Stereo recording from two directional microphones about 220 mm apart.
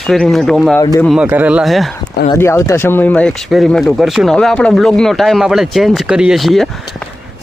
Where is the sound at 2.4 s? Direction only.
15° left (ahead or behind).